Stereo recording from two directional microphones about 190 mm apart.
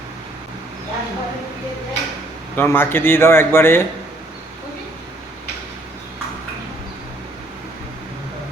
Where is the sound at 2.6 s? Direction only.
10° left (ahead or behind).